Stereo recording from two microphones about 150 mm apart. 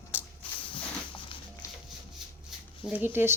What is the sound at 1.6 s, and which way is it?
Music, 20° left (ahead or behind).